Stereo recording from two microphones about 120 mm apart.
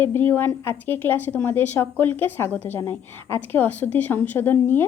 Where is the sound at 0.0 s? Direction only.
20° left (ahead or behind).